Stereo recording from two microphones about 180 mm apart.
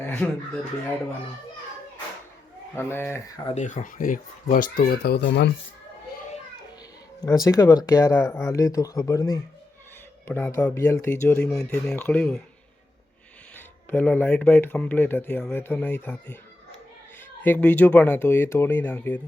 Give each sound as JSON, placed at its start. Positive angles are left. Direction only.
{"t": 0.0, "sound": "speech", "side_deg": 10}
{"t": 2.7, "sound": "speech", "side_deg": 10}
{"t": 3.5, "sound": "speech", "side_deg": 45}
{"t": 7.3, "sound": "speech", "side_deg": 15}
{"t": 13.9, "sound": "speech", "side_deg": 10}
{"t": 17.4, "sound": "speech", "side_deg": 10}